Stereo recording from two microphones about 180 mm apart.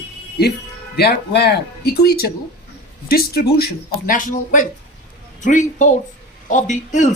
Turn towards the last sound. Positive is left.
turn(degrees=45)  # may be behind; listen again after turning